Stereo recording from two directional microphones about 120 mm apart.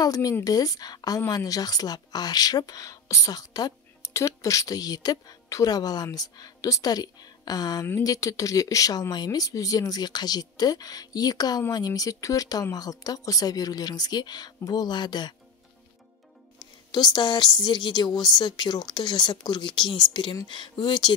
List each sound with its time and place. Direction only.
0.0 s a woman's voice: 30° left (ahead or behind)
16.5 s a woman's voice: 35° left (ahead or behind)